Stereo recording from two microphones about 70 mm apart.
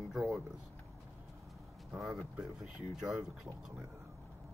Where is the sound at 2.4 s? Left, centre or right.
Centre.